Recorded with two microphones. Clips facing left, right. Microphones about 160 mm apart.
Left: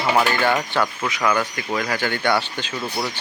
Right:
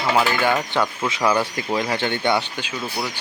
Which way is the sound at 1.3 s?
30° right (ahead or behind).